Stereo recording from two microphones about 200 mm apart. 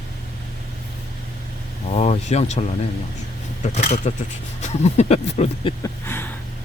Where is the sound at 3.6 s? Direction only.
35° left (ahead or behind).